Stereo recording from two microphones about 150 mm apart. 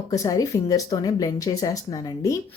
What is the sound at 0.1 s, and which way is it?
Speech, 25° left (ahead or behind).